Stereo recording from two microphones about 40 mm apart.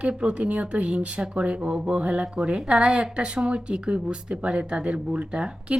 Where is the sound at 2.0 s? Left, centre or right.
Right.